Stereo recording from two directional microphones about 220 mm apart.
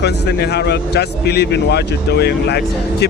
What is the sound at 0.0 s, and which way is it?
Speech, 50° left (ahead or behind).